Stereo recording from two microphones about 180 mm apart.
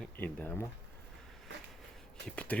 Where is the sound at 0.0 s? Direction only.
10° left (ahead or behind).